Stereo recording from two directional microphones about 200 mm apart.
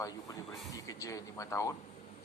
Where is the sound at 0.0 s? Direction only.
15° left (ahead or behind).